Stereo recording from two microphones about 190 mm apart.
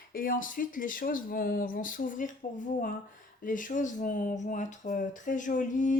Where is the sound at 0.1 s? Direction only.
50° left (ahead or behind).